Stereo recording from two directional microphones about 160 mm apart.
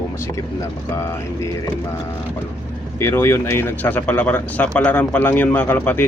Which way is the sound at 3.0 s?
15° left (ahead or behind).